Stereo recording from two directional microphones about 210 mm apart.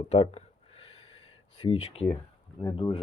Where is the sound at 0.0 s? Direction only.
30° left (ahead or behind).